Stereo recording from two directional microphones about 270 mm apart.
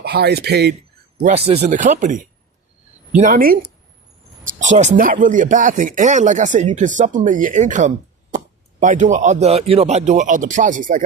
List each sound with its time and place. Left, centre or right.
0.0 s speech: right
1.2 s speech: right